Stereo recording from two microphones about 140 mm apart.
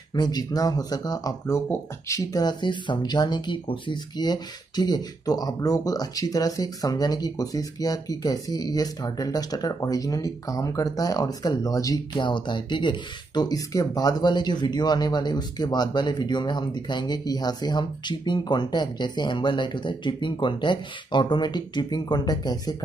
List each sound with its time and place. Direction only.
0.1 s speech: 30° left (ahead or behind)